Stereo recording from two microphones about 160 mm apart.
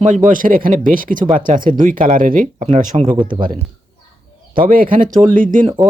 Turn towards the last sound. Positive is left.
turn(degrees=-55)  # may be behind; listen again after turning